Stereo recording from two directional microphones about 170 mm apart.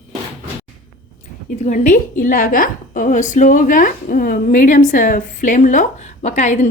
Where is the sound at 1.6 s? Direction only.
50° left (ahead or behind).